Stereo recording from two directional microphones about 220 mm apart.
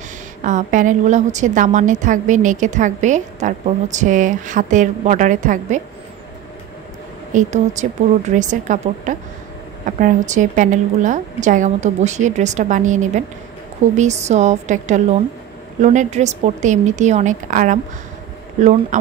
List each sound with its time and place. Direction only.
0.4 s a woman's voice: 35° right (ahead or behind)
7.3 s a woman's voice: 35° right (ahead or behind)